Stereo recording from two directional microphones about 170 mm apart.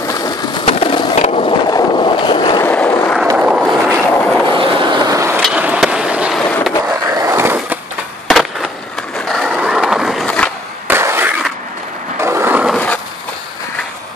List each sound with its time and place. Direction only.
0.7 s skateboard: 35° left (ahead or behind)
1.7 s boat: 30° left (ahead or behind)
2.6 s vehicle: 10° left (ahead or behind)
3.3 s vehicle: 5° right (ahead or behind)
4.1 s vehicle: 10° left (ahead or behind)
4.6 s vehicle: 25° right (ahead or behind)
5.4 s skateboard: 5° right (ahead or behind)
6.4 s skateboard: 5° left (ahead or behind)
6.9 s skateboard: 15° right (ahead or behind)
8.3 s skateboard: centre (ahead or behind)
10.9 s skateboard: 15° right (ahead or behind)
12.2 s a sound: 15° right (ahead or behind)
12.7 s dog: 10° left (ahead or behind)